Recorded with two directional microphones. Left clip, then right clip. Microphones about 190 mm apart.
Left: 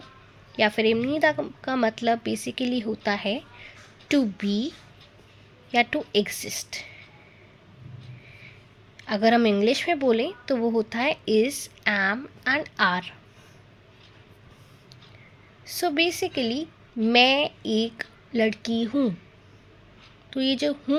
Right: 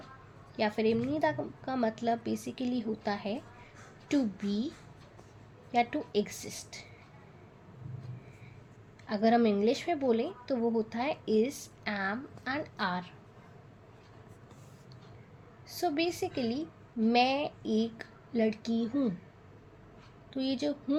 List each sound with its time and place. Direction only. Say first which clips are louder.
0.5 s a woman's voice: left 8 dB; 40° left (ahead or behind)
5.7 s a woman's voice: left 7 dB; 40° left (ahead or behind)
9.0 s a woman's voice: left 6 dB; 40° left (ahead or behind)
15.6 s a woman's voice: left 8 dB; 40° left (ahead or behind)
20.3 s speech: left 8 dB; 40° left (ahead or behind)